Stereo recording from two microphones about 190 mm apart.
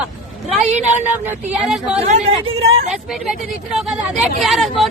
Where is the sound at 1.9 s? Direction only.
35° right (ahead or behind).